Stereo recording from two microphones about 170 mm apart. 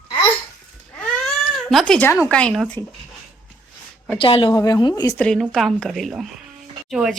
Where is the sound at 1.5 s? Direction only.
Centre (ahead or behind).